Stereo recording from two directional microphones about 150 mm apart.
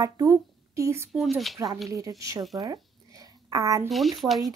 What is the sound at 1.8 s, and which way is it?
Speech, 20° right (ahead or behind).